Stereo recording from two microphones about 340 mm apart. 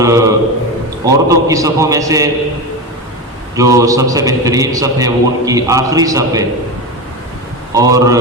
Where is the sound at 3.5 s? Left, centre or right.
Centre.